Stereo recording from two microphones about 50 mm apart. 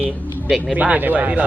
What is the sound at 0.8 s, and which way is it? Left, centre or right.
Speech, right.